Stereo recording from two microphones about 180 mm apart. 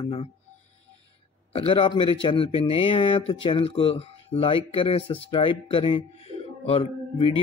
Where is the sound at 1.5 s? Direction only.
30° left (ahead or behind).